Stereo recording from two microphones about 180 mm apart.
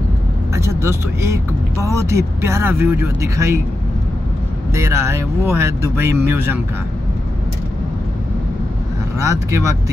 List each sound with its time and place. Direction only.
0.6 s speech: 15° right (ahead or behind)
4.7 s speech: 15° right (ahead or behind)
9.2 s speech: 15° right (ahead or behind)